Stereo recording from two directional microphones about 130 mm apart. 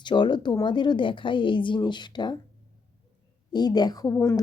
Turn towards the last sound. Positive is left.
turn(degrees=25)  # may be behind; listen again after turning